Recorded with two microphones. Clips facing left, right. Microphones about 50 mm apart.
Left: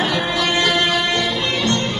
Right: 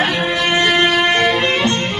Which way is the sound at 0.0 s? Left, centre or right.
Right.